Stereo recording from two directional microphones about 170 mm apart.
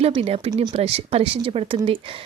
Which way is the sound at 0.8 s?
35° right (ahead or behind).